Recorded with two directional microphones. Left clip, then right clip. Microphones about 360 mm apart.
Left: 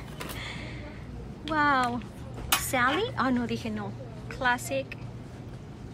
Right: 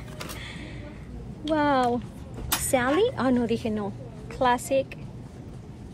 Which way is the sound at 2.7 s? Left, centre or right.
Centre.